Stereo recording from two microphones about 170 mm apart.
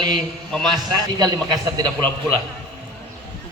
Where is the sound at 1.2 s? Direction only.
25° right (ahead or behind).